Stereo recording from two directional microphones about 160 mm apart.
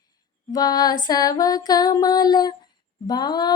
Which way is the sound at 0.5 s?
25° left (ahead or behind).